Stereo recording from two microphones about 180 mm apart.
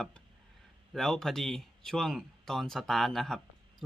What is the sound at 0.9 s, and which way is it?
Speech, 5° left (ahead or behind).